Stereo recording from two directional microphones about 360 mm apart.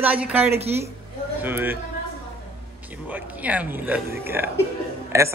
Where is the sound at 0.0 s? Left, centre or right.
Centre.